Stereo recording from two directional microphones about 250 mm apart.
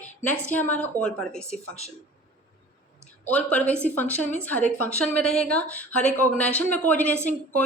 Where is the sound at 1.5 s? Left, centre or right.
Right.